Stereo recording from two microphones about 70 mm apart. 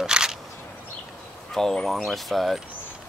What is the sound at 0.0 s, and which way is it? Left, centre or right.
Single-lens reflex camera, centre.